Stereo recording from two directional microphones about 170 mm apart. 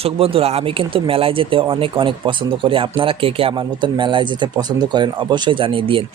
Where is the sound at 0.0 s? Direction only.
35° right (ahead or behind).